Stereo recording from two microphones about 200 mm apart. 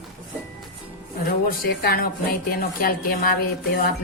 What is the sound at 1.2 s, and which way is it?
Speech, 45° left (ahead or behind).